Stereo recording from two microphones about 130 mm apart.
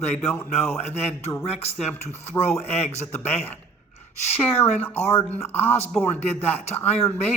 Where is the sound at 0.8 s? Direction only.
55° left (ahead or behind).